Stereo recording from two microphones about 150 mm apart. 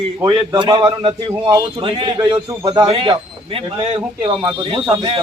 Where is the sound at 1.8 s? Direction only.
35° right (ahead or behind).